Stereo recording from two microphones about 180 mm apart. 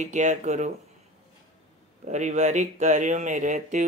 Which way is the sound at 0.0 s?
40° right (ahead or behind).